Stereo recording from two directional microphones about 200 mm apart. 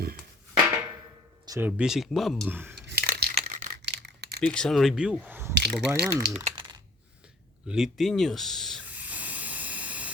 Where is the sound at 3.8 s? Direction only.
60° right (ahead or behind).